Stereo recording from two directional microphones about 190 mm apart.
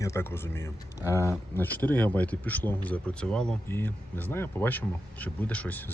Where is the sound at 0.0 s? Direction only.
15° left (ahead or behind).